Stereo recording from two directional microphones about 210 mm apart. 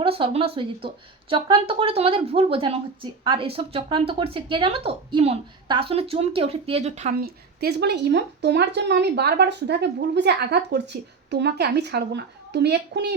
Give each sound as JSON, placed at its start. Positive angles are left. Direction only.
{"t": 0.0, "sound": "speech", "side_deg": -25}
{"t": 7.6, "sound": "speech", "side_deg": -50}